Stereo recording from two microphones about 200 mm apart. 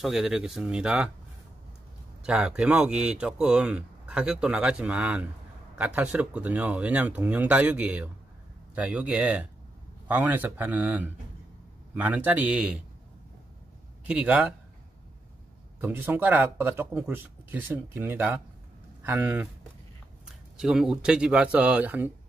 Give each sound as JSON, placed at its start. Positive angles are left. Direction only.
{"t": 0.0, "sound": "speech", "side_deg": 0}
{"t": 2.2, "sound": "speech", "side_deg": -5}
{"t": 14.0, "sound": "speech", "side_deg": -5}
{"t": 15.8, "sound": "speech", "side_deg": -10}
{"t": 20.5, "sound": "speech", "side_deg": -5}